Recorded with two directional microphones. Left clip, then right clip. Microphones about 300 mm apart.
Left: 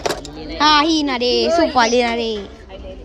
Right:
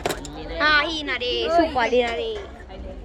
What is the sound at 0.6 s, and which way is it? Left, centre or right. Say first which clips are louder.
Speech: left 6 dB; centre.